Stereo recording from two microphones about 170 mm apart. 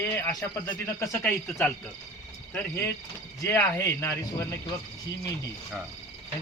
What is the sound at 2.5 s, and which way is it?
Speech, 15° left (ahead or behind).